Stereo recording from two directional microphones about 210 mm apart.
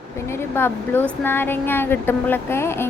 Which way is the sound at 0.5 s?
10° left (ahead or behind).